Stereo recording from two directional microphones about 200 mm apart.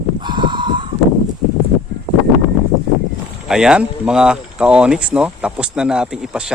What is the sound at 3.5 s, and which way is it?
Speech, 5° right (ahead or behind).